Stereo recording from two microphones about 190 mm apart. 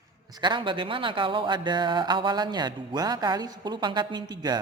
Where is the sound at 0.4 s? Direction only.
25° right (ahead or behind).